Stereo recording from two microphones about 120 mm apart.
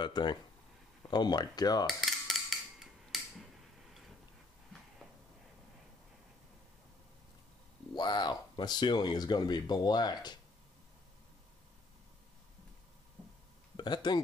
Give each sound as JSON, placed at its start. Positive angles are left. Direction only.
{"t": 0.0, "sound": "speech", "side_deg": 40}
{"t": 1.9, "sound": "cutlery", "side_deg": 0}
{"t": 2.8, "sound": "a sound", "side_deg": 0}
{"t": 7.9, "sound": "speech", "side_deg": 35}
{"t": 13.7, "sound": "speech", "side_deg": 40}